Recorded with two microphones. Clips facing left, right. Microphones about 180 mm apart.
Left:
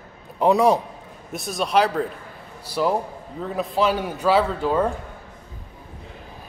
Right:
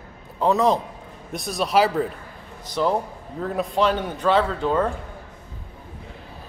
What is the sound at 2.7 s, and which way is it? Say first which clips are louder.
A man's voice: even; 5° left (ahead or behind).